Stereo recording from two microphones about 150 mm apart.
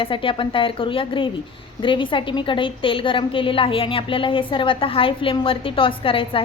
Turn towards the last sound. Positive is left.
turn(degrees=35)  # may be behind; listen again after turning